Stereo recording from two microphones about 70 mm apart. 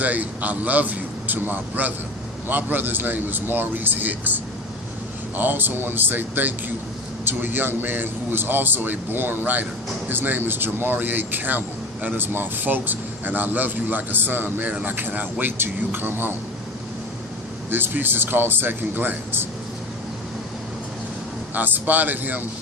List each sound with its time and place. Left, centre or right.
0.0 s speech: right
5.4 s speech: right
17.7 s speech: right
21.5 s speech: right